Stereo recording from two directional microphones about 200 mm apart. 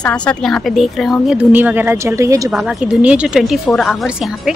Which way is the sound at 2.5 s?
5° right (ahead or behind).